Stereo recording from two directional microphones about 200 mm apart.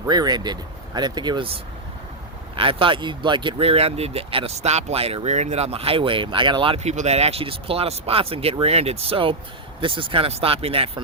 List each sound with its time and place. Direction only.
0.0 s speech: 20° right (ahead or behind)
2.6 s speech: 25° right (ahead or behind)